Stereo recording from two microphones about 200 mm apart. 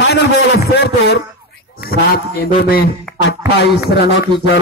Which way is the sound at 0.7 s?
55° left (ahead or behind).